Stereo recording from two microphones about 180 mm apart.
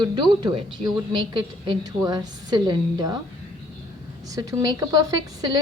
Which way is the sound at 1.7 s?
20° right (ahead or behind).